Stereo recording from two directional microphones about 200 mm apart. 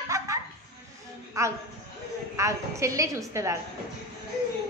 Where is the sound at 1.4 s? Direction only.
15° right (ahead or behind).